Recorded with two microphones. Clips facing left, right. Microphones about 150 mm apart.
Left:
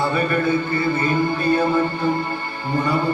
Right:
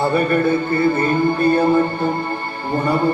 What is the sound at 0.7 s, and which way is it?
Music, 50° right (ahead or behind).